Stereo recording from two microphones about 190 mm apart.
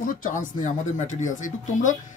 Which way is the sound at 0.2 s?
45° left (ahead or behind).